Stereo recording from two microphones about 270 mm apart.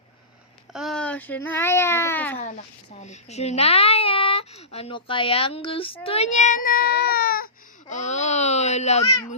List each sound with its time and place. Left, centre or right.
0.7 s a child's voice: centre
3.0 s speech: left